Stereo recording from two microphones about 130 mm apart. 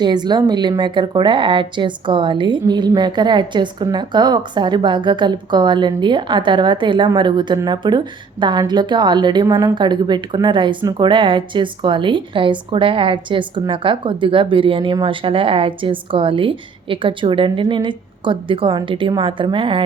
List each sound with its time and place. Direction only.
0.0 s a woman's voice: 35° right (ahead or behind)